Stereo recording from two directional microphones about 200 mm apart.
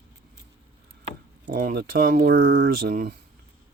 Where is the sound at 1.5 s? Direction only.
50° right (ahead or behind).